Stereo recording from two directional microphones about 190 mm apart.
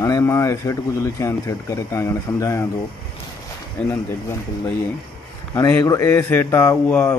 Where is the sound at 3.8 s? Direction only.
5° left (ahead or behind).